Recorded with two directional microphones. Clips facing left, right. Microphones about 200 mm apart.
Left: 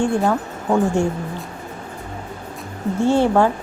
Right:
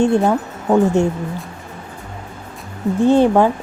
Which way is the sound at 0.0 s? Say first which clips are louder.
Right 4 dB; 20° right (ahead or behind).